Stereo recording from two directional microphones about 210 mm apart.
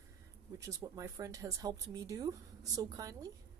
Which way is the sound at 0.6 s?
15° right (ahead or behind).